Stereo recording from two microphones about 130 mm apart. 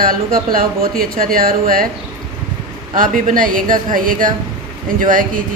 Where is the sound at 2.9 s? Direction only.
90° right.